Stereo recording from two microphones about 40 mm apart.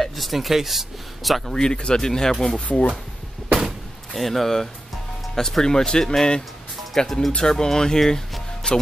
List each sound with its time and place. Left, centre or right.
0.0 s speech: centre
1.5 s speech: left
2.6 s speech: left
3.5 s door: centre
5.3 s speech: centre
7.1 s speech: centre
8.0 s speech: centre
8.6 s music: left